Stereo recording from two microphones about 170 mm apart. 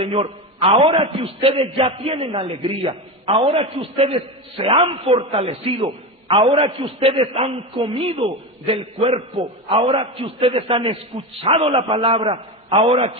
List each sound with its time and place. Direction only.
0.0 s a man's voice: 35° right (ahead or behind)